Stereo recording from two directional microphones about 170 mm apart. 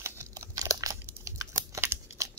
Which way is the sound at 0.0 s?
15° right (ahead or behind).